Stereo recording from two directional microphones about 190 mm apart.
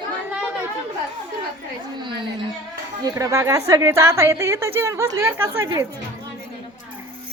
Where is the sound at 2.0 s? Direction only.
25° right (ahead or behind).